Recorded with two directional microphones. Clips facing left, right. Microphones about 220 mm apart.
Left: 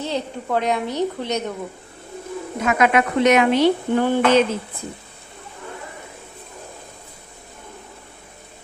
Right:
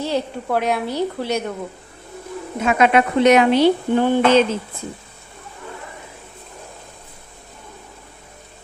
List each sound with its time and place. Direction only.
0.0 s a woman's voice: 10° right (ahead or behind)
2.6 s speech: 30° right (ahead or behind)